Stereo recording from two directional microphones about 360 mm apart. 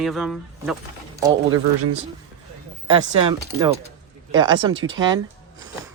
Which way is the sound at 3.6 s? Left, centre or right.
Centre.